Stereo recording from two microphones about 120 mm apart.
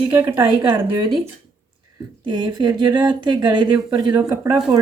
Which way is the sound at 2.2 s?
35° right (ahead or behind).